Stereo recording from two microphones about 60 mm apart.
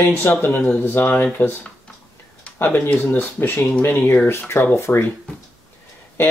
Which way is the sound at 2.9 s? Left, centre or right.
Left.